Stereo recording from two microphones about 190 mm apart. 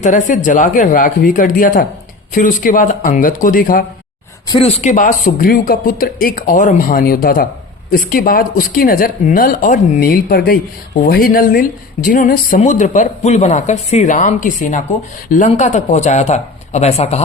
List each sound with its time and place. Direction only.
0.0 s speech: 40° left (ahead or behind)
4.4 s speech: 30° left (ahead or behind)